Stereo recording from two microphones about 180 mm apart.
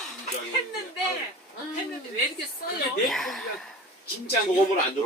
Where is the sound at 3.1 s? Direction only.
Centre (ahead or behind).